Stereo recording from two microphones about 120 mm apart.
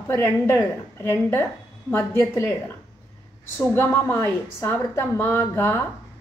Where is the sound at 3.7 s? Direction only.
15° left (ahead or behind).